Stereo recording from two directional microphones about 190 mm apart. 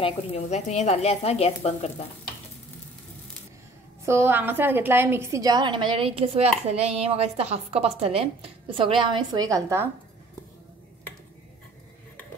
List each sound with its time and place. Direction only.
0.0 s speech: 35° left (ahead or behind)
4.0 s a woman's voice: 15° right (ahead or behind)